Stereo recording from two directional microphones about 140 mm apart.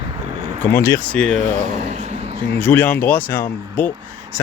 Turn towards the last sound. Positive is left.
turn(degrees=15)  # may be behind; listen again after turning